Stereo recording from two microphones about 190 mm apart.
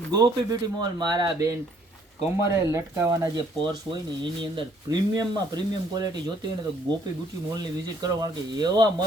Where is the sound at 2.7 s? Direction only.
15° right (ahead or behind).